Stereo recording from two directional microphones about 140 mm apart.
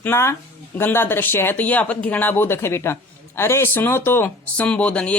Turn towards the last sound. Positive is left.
turn(degrees=10)  # may be behind; listen again after turning